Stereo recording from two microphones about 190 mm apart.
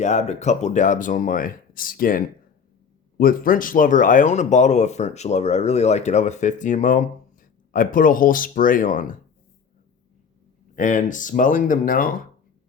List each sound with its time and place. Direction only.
0.0 s speech: 35° left (ahead or behind)
10.8 s speech: 40° left (ahead or behind)